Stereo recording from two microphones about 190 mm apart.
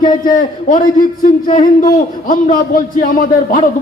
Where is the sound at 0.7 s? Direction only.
45° left (ahead or behind).